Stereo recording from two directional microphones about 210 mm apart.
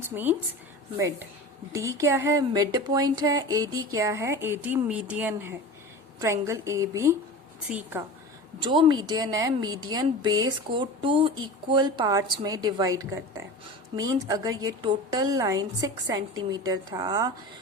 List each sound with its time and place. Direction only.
0.0 s a woman's voice: 10° right (ahead or behind)
1.7 s speech: 15° right (ahead or behind)
8.6 s a woman's voice: 25° right (ahead or behind)